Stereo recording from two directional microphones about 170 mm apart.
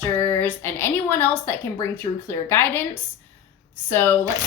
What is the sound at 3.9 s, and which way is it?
Speech, 15° left (ahead or behind).